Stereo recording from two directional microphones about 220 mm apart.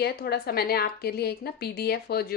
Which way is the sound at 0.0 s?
45° left (ahead or behind).